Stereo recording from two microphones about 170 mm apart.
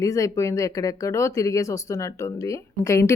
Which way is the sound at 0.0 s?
20° left (ahead or behind).